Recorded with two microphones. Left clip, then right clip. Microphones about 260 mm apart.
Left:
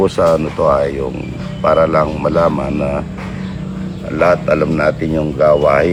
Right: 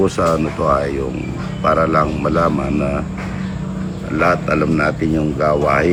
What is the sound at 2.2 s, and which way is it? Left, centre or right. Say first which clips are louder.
Speech: left 3 dB; left.